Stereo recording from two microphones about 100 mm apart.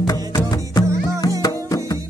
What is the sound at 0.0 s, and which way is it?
Music, 40° left (ahead or behind).